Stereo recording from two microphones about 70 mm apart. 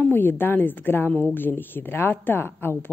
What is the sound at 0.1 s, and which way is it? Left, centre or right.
Speech, left.